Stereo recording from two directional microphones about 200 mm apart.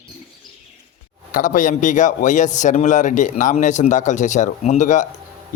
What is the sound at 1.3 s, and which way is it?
A man's voice, 40° left (ahead or behind).